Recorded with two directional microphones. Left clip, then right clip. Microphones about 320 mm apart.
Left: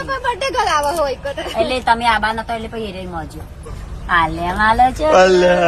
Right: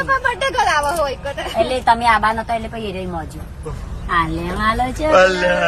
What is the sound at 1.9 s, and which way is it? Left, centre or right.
Speech, left.